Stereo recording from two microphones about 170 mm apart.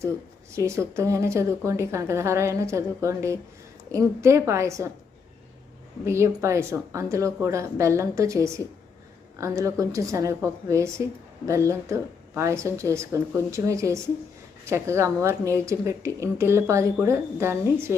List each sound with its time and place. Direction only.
0.5 s a woman's voice: 15° right (ahead or behind)
6.1 s a woman's voice: 15° right (ahead or behind)